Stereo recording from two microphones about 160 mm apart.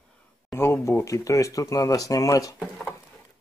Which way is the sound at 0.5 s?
15° left (ahead or behind).